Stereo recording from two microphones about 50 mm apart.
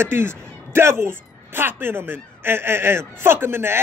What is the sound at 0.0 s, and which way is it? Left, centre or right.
A man's voice, right.